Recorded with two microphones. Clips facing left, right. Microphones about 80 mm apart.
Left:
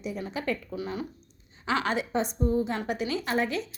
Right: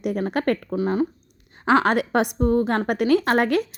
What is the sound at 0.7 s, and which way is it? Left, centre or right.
Speech, right.